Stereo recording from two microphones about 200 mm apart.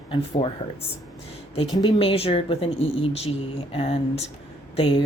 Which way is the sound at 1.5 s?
25° left (ahead or behind).